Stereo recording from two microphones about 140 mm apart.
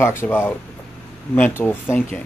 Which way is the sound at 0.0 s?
15° left (ahead or behind).